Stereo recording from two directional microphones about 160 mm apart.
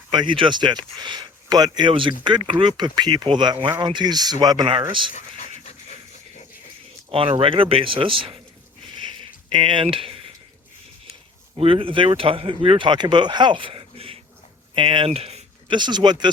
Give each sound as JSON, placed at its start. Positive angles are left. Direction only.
{"t": 0.1, "sound": "speech", "side_deg": -30}
{"t": 5.1, "sound": "a sound", "side_deg": 50}
{"t": 7.1, "sound": "speech", "side_deg": -35}
{"t": 9.5, "sound": "speech", "side_deg": -30}
{"t": 11.5, "sound": "speech", "side_deg": -35}